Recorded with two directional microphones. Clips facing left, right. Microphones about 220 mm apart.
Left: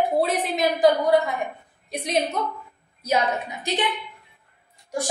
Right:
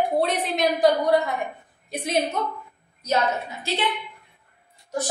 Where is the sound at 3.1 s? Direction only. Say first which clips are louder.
Even; 15° left (ahead or behind).